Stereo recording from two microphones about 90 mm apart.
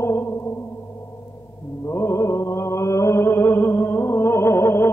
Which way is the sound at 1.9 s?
30° left (ahead or behind).